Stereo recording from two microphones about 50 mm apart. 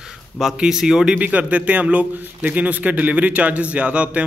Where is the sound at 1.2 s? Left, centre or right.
Right.